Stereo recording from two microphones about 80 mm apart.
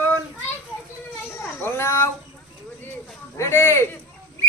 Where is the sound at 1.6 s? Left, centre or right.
Left.